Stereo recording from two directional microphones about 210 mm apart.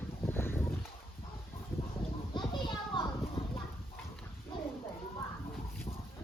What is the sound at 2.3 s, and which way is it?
Children playing, 20° left (ahead or behind).